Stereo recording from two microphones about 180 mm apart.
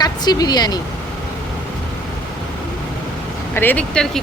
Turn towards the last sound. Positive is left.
turn(degrees=5)  # may be behind; listen again after turning